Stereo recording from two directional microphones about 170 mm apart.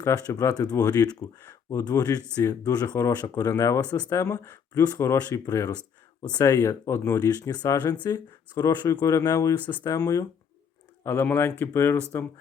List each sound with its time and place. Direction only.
0.0 s speech: 20° left (ahead or behind)